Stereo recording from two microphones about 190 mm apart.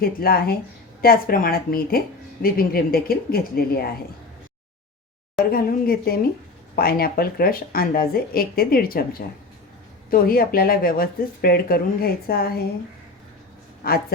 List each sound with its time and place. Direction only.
0.0 s speech: 50° left (ahead or behind)
5.5 s speech: 50° left (ahead or behind)
13.8 s speech: 55° left (ahead or behind)